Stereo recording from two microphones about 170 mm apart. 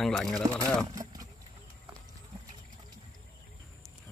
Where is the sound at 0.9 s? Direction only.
20° right (ahead or behind).